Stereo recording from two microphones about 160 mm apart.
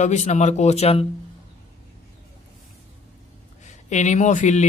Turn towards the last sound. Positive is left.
turn(degrees=50)  # may be behind; listen again after turning